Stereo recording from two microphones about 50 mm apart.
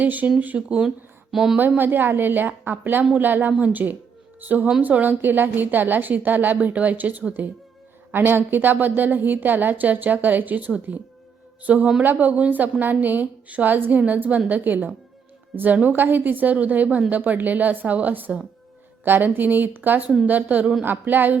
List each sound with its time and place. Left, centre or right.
0.0 s a woman's voice: right
0.9 s speech: centre
1.5 s a woman's voice: right
8.1 s a woman's voice: right